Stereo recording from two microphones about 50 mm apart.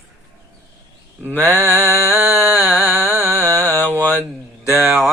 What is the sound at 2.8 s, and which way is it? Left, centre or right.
Music, right.